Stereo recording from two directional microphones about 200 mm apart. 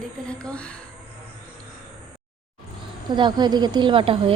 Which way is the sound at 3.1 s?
20° right (ahead or behind).